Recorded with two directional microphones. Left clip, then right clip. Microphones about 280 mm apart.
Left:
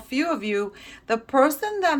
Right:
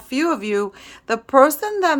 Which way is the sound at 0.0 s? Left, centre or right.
Centre.